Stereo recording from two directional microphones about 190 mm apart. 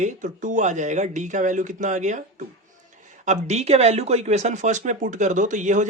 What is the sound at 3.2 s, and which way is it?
Speech, 40° right (ahead or behind).